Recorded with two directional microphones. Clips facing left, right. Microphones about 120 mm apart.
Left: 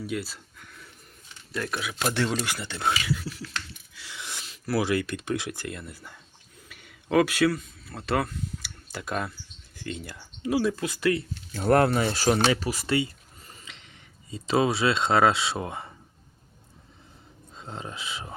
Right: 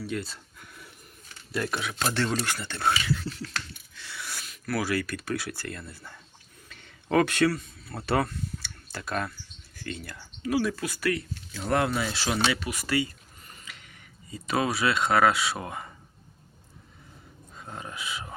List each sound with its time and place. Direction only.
0.0 s speech: 5° left (ahead or behind)
1.5 s speech: 5° right (ahead or behind)
2.0 s speech: 15° left (ahead or behind)
8.9 s speech: 15° left (ahead or behind)
11.5 s speech: 45° left (ahead or behind); by 15.9 s 25° left (ahead or behind)
17.5 s speech: 25° left (ahead or behind)